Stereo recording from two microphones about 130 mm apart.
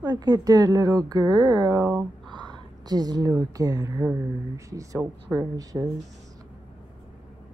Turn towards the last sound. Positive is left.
turn(degrees=-25)  # may be behind; listen again after turning